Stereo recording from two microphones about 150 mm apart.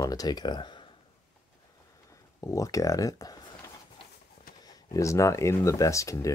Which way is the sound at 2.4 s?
20° left (ahead or behind).